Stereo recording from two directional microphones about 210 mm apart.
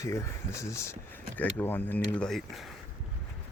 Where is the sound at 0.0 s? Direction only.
15° left (ahead or behind).